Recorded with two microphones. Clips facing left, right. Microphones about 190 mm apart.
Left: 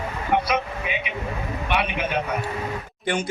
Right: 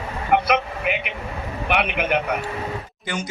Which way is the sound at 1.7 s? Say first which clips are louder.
Right 3 dB; 65° right (ahead or behind).